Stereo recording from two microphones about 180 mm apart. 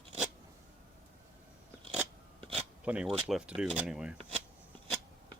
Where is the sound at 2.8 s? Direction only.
5° right (ahead or behind).